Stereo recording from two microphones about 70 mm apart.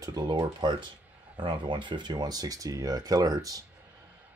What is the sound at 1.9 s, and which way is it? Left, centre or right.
Speech, right.